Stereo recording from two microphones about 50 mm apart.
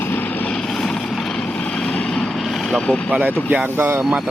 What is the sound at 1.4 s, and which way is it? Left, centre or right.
Vehicle, centre.